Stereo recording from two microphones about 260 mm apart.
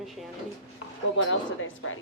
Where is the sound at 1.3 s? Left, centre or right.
Left.